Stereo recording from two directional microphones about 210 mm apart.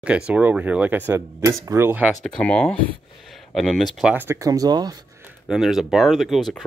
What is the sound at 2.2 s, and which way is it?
Speech, 5° left (ahead or behind).